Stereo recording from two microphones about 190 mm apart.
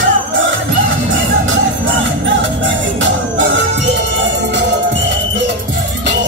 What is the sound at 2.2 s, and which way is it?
Music, 75° right (ahead or behind).